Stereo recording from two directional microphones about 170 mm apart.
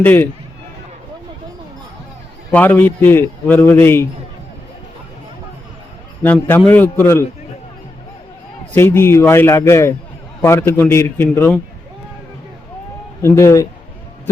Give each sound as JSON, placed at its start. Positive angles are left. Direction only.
{"t": 0.0, "sound": "a man's voice", "side_deg": 10}
{"t": 2.5, "sound": "a man's voice", "side_deg": 10}
{"t": 6.2, "sound": "a man's voice", "side_deg": 10}
{"t": 8.7, "sound": "a man's voice", "side_deg": 15}
{"t": 13.2, "sound": "a man's voice", "side_deg": 15}